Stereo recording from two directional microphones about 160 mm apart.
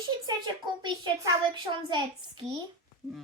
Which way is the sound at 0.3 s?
25° right (ahead or behind).